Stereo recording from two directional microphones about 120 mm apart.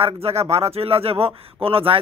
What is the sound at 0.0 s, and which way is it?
A man's voice, 55° right (ahead or behind).